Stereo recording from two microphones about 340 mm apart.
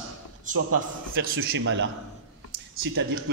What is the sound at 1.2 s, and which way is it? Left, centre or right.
A man's voice, right.